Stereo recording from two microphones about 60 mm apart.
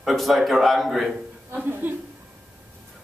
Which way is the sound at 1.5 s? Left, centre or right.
Right.